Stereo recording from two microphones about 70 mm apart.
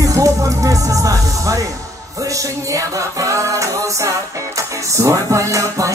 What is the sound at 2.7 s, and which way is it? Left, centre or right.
Music, right.